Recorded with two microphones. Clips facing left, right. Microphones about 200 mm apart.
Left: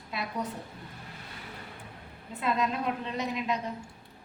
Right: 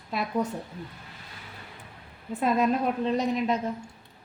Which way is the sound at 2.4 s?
45° right (ahead or behind).